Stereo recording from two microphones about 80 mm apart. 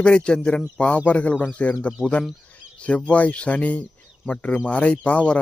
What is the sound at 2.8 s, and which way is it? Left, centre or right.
Speech, centre.